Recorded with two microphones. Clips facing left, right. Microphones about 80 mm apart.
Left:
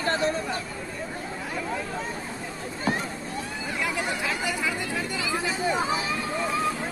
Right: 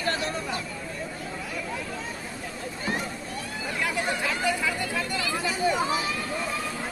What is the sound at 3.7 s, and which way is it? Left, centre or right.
Chatter, left.